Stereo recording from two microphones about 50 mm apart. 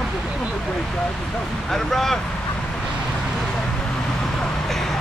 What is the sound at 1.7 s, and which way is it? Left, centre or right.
Speech, centre.